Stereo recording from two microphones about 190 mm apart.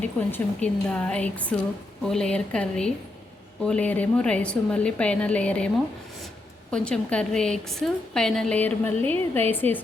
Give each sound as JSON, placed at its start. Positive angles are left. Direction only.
{"t": 0.0, "sound": "a woman's voice", "side_deg": 10}